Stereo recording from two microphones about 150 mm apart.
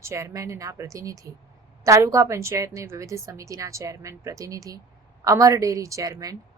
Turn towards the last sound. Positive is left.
turn(degrees=-25)  # may be behind; listen again after turning